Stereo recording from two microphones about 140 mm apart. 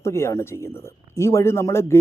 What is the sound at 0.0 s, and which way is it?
A man's voice, 20° left (ahead or behind).